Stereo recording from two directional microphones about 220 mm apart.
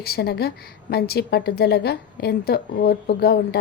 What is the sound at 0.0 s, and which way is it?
A woman's voice, 45° left (ahead or behind).